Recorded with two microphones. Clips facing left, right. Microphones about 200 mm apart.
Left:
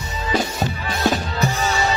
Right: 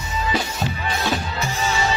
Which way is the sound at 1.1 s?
40° left (ahead or behind).